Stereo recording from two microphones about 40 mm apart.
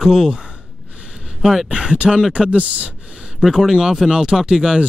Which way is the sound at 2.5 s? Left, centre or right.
Right.